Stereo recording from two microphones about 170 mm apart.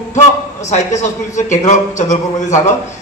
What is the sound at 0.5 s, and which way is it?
Speech, 45° left (ahead or behind).